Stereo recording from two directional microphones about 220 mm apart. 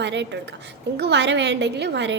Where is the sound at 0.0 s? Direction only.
55° right (ahead or behind).